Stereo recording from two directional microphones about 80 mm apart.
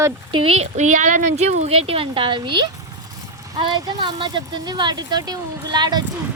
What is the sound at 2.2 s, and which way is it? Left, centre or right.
Speech, right.